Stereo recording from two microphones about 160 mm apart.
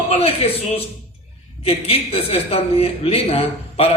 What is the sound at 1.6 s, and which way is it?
A woman's voice, 35° left (ahead or behind).